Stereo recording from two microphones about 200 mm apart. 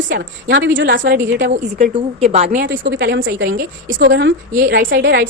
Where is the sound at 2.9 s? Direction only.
60° right (ahead or behind).